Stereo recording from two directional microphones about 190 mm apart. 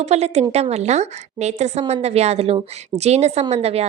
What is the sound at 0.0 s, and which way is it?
A woman's voice, 35° right (ahead or behind).